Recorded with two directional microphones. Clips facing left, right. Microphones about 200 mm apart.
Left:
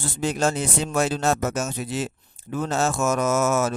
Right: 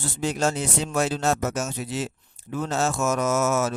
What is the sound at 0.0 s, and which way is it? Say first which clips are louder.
Speech: left 1 dB; 55° left (ahead or behind).